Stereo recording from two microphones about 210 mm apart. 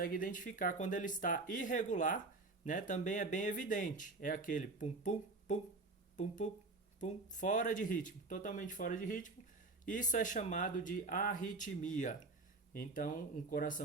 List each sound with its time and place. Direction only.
0.0 s speech: 40° left (ahead or behind)